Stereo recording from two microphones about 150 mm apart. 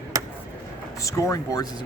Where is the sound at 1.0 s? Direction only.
20° left (ahead or behind).